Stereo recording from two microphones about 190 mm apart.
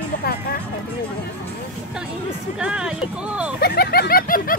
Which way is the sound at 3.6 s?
55° left (ahead or behind).